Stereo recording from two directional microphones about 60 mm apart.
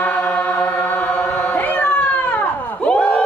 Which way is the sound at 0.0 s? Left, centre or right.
Left.